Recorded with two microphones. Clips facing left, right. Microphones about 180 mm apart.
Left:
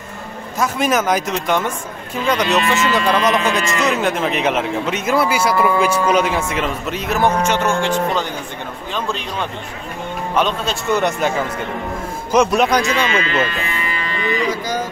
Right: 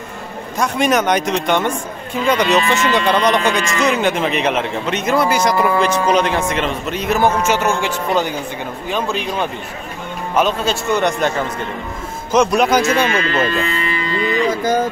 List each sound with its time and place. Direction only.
0.6 s speech: centre (ahead or behind)
12.8 s speech: 45° right (ahead or behind)
14.4 s music: 50° right (ahead or behind)